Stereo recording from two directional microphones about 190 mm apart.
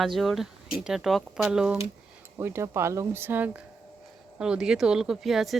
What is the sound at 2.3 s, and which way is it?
Speech, 15° right (ahead or behind).